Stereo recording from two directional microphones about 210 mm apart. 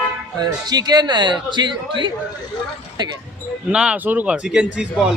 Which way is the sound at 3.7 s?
5° right (ahead or behind).